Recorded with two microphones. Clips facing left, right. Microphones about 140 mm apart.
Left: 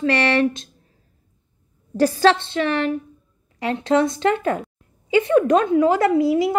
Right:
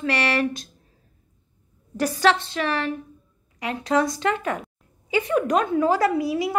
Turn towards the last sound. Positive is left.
turn(degrees=25)  # may be behind; listen again after turning